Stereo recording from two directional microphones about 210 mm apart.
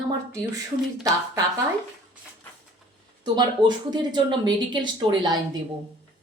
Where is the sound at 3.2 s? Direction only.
20° right (ahead or behind).